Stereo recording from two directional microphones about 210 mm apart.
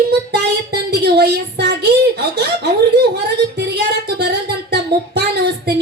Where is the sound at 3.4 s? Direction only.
50° right (ahead or behind).